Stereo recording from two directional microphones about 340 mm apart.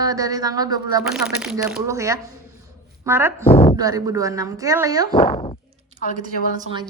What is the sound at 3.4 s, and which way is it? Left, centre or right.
Speech, centre.